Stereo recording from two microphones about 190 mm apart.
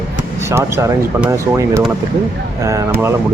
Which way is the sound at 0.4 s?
15° right (ahead or behind).